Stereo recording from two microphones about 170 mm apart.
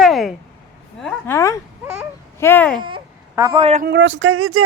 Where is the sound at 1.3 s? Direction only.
20° left (ahead or behind).